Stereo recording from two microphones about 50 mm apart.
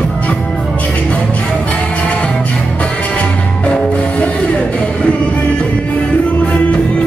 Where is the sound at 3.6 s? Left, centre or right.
Left.